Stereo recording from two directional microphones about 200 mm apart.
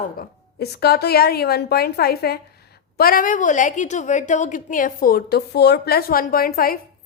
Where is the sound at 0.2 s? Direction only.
50° left (ahead or behind).